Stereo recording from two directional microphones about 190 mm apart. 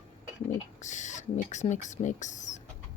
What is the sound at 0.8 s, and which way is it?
Speech, 40° left (ahead or behind).